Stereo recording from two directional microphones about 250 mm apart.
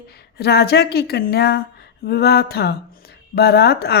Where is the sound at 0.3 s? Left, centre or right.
Left.